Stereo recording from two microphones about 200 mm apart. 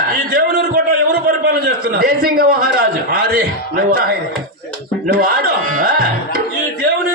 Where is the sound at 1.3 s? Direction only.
45° right (ahead or behind).